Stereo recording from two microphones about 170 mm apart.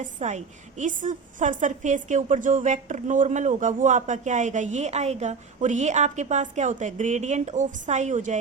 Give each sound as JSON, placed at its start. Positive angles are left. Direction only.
{"t": 0.0, "sound": "a woman's voice", "side_deg": -45}